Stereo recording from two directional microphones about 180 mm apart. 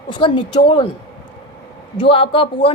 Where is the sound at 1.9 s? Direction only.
30° left (ahead or behind).